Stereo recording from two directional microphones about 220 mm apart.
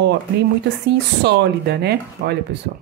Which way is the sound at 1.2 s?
50° right (ahead or behind).